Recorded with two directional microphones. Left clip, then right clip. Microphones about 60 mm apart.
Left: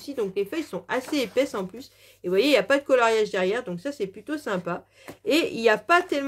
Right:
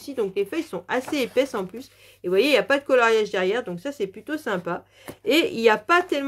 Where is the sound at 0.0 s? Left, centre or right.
Right.